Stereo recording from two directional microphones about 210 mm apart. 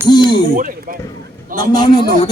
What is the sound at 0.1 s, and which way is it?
Speech, 20° left (ahead or behind).